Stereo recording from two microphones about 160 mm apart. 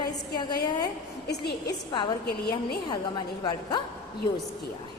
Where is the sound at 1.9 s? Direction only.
30° left (ahead or behind).